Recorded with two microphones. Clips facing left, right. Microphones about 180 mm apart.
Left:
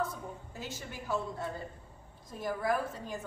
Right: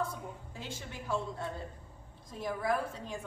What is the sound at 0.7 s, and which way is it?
A woman's voice, 5° left (ahead or behind).